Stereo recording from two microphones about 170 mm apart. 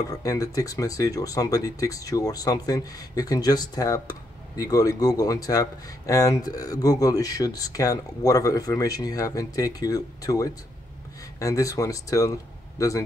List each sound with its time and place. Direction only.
0.1 s speech: 20° left (ahead or behind)